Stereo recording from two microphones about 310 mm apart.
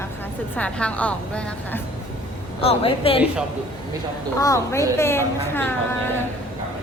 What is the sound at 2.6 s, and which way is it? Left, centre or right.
Speech, centre.